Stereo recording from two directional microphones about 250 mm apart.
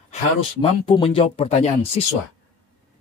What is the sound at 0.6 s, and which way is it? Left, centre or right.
Speech, left.